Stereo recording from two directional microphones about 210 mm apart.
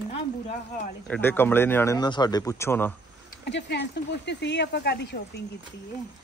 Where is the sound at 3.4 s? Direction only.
55° left (ahead or behind).